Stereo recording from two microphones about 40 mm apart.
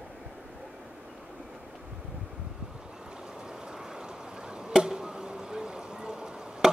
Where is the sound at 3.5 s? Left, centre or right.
Centre.